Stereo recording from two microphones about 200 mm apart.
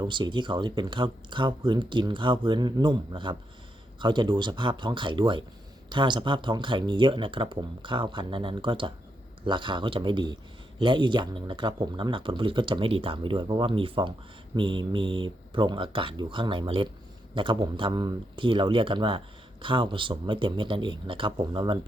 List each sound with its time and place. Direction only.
0.0 s speech: 25° right (ahead or behind)